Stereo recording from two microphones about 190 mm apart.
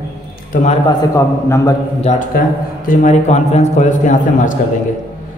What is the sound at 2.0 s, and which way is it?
A man's voice, 40° left (ahead or behind).